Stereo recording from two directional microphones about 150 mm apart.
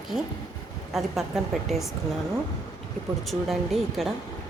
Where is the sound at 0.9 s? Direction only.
Centre (ahead or behind).